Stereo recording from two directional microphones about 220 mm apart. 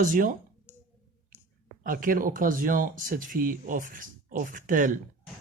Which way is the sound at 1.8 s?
40° right (ahead or behind).